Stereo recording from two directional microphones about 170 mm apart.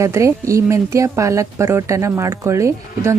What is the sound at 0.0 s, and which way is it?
Speech, 15° right (ahead or behind).